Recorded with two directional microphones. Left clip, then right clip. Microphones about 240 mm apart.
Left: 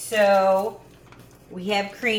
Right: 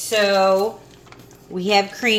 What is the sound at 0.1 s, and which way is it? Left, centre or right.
Speech, right.